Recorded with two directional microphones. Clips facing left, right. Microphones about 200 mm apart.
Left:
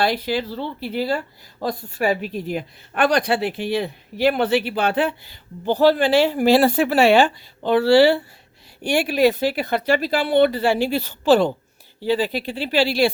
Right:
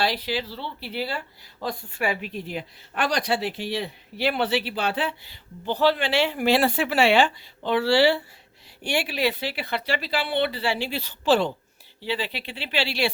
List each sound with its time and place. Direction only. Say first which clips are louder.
0.0 s speech: left 5 dB; 50° left (ahead or behind)